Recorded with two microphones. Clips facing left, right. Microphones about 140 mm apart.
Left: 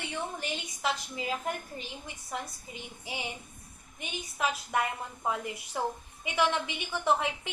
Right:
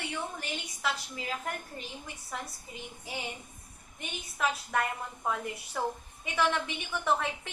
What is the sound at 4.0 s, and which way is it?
A woman's voice, 20° left (ahead or behind).